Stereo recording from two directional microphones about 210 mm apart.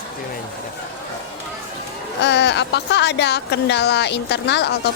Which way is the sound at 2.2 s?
55° left (ahead or behind).